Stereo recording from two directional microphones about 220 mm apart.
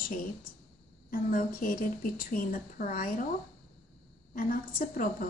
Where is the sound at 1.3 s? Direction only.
40° left (ahead or behind).